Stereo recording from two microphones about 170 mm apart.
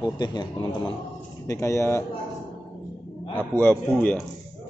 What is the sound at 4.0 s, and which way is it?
Speech, 10° left (ahead or behind).